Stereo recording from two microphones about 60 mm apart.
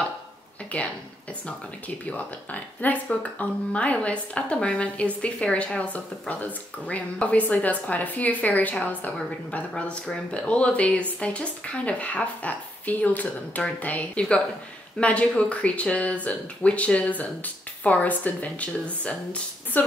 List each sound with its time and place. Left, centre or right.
0.7 s a woman's voice: left
2.0 s a woman's voice: left